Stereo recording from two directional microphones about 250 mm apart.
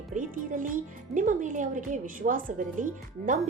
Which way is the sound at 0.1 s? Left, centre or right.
Right.